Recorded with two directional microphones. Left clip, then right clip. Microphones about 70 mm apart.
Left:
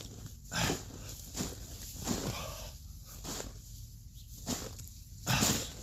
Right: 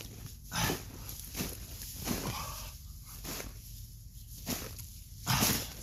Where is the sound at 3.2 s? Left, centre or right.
Left.